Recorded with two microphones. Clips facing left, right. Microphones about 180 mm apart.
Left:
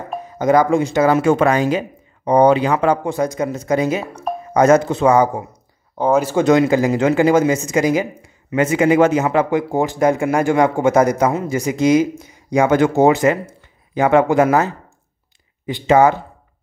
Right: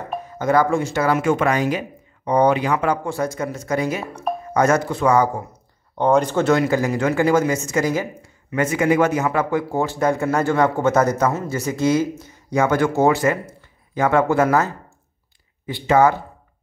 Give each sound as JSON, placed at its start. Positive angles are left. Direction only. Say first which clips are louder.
{"t": 0.4, "sound": "speech", "louder": "left 4 dB", "side_deg": 20}
{"t": 5.9, "sound": "speech", "louder": "left 1 dB", "side_deg": 5}